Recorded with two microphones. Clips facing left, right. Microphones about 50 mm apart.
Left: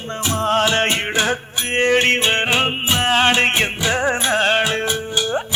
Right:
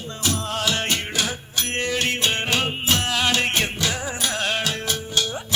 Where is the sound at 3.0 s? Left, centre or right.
Left.